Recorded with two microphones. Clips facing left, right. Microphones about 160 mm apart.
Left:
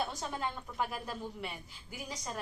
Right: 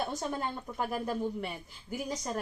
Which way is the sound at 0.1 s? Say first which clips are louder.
Right 4 dB; 45° right (ahead or behind).